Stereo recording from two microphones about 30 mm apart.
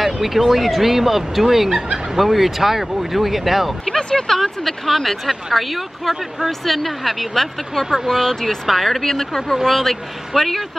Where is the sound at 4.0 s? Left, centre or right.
Left.